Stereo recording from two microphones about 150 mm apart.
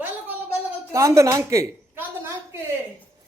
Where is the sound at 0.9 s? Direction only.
20° right (ahead or behind).